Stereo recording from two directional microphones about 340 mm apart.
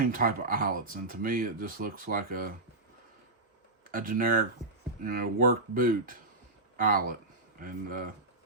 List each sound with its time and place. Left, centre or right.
0.0 s speech: right
3.9 s speech: right